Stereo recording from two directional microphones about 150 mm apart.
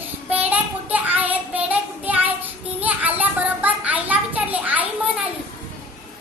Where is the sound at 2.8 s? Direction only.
10° right (ahead or behind).